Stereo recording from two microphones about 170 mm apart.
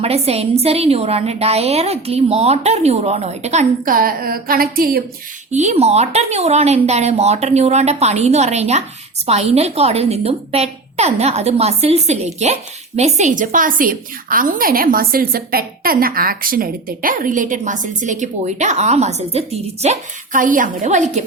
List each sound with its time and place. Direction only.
0.0 s a woman's voice: 35° right (ahead or behind); by 5.0 s 60° right (ahead or behind)
5.5 s a woman's voice: 45° right (ahead or behind)